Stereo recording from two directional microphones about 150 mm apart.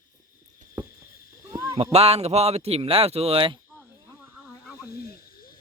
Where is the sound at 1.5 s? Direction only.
20° right (ahead or behind).